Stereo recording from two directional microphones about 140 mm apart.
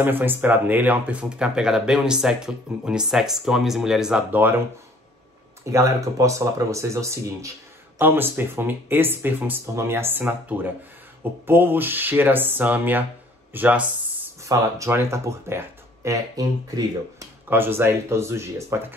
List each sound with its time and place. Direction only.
0.0 s speech: 15° right (ahead or behind)
5.7 s speech: 20° right (ahead or behind)